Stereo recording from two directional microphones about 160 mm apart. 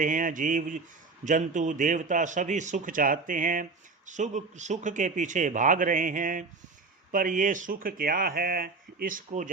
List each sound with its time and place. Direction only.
0.0 s a man's voice: 55° right (ahead or behind)